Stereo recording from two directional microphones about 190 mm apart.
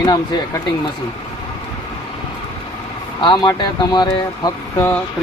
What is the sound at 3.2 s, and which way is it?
Speech, 25° left (ahead or behind).